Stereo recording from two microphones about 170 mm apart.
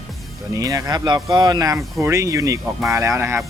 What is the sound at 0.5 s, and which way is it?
Speech, 20° right (ahead or behind).